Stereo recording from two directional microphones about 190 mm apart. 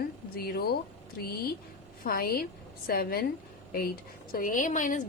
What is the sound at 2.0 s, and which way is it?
A woman's voice, 50° left (ahead or behind).